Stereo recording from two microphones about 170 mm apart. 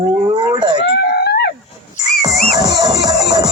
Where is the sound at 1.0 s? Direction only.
70° left (ahead or behind).